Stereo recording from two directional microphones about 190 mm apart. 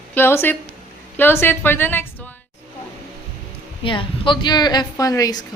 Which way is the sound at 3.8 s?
25° left (ahead or behind).